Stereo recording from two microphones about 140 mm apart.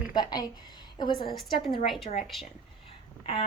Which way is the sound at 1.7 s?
40° left (ahead or behind).